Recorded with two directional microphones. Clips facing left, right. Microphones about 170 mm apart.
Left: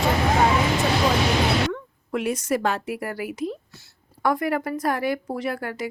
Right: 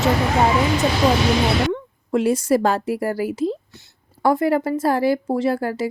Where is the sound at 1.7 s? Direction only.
30° right (ahead or behind).